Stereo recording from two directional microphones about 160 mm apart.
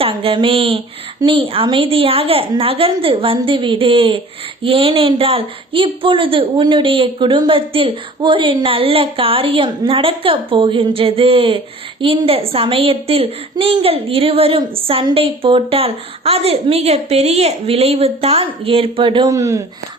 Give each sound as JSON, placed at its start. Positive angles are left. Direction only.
{"t": 0.0, "sound": "a woman's voice", "side_deg": -35}